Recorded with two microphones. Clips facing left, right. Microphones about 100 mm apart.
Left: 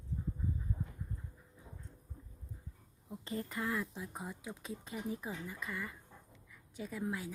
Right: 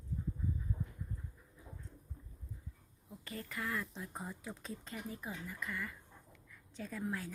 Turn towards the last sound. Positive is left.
turn(degrees=10)  # may be behind; listen again after turning